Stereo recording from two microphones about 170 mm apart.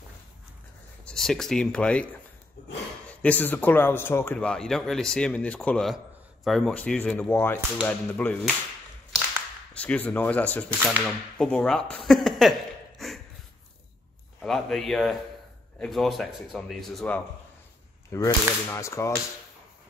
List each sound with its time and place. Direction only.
1.0 s speech: 5° left (ahead or behind)
3.2 s a man's voice: 10° left (ahead or behind)
9.8 s a man's voice: 10° left (ahead or behind)
10.8 s cap gun: 10° right (ahead or behind)
11.3 s speech: 5° left (ahead or behind)
13.0 s a sound: centre (ahead or behind)
14.4 s a man's voice: centre (ahead or behind)
18.1 s a man's voice: 15° left (ahead or behind)